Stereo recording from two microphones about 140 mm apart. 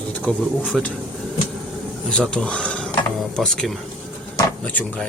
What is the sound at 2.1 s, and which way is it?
Speech, 10° left (ahead or behind).